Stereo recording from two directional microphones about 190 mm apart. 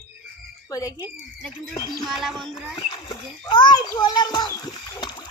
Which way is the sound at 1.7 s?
20° left (ahead or behind).